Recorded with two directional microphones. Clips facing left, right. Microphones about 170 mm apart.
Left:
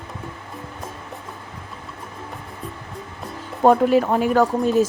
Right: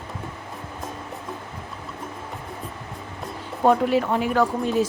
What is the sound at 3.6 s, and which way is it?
Speech, 45° left (ahead or behind).